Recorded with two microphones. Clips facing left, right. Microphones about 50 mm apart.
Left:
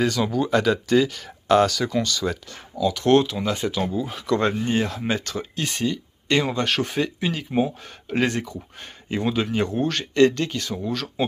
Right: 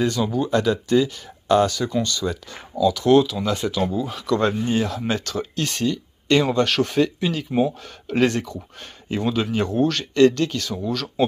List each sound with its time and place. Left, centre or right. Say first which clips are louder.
0.0 s speech: even; left
3.1 s speech: right 1 dB; left
3.3 s speech: right 2 dB; left